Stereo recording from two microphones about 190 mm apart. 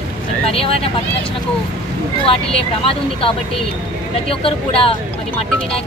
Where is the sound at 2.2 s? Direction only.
30° left (ahead or behind).